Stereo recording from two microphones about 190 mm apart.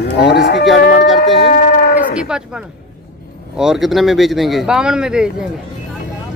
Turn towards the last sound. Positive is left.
turn(degrees=-5)  # may be behind; listen again after turning